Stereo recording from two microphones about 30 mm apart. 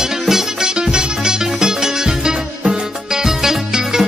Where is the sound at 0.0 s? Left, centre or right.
Centre.